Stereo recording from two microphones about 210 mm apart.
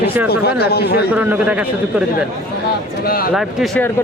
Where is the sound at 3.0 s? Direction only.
45° left (ahead or behind).